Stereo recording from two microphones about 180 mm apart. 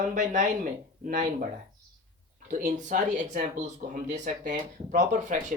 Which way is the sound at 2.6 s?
45° right (ahead or behind).